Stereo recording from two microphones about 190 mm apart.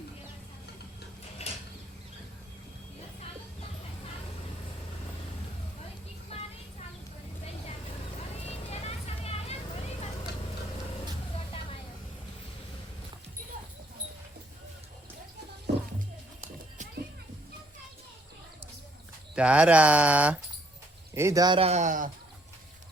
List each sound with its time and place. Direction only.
1.4 s a sound: 30° left (ahead or behind)
6.3 s music: 30° left (ahead or behind)
8.4 s vehicle: 35° left (ahead or behind)
15.7 s music: 60° right (ahead or behind)
19.4 s speech: 5° right (ahead or behind); by 22.1 s 45° right (ahead or behind)